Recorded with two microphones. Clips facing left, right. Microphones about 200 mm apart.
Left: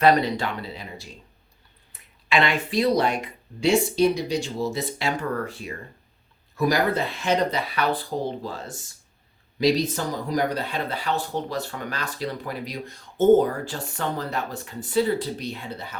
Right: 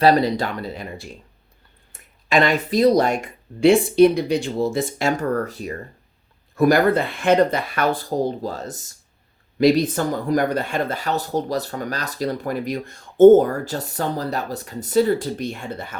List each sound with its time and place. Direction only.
0.0 s speech: 35° right (ahead or behind)
6.6 s speech: 55° right (ahead or behind)
9.6 s speech: 55° right (ahead or behind)